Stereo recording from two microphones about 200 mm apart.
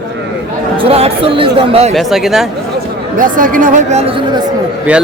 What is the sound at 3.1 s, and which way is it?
Speech, 40° right (ahead or behind).